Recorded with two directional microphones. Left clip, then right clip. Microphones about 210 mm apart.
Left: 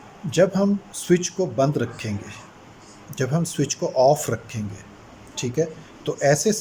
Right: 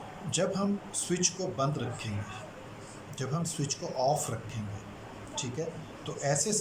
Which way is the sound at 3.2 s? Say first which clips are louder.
Left 11 dB; 45° left (ahead or behind).